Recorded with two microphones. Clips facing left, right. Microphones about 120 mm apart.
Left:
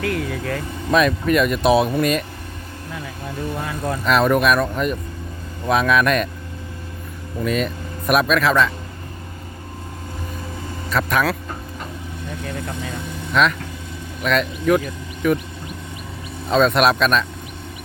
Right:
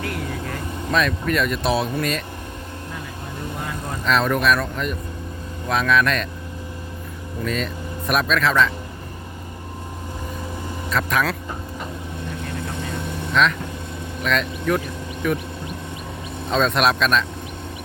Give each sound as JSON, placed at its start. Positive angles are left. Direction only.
{"t": 0.0, "sound": "vehicle", "side_deg": 90}
{"t": 0.9, "sound": "speech", "side_deg": 15}
{"t": 4.0, "sound": "speech", "side_deg": 10}
{"t": 7.4, "sound": "speech", "side_deg": 10}
{"t": 10.9, "sound": "speech", "side_deg": 5}
{"t": 13.4, "sound": "speech", "side_deg": 5}
{"t": 16.5, "sound": "speech", "side_deg": 5}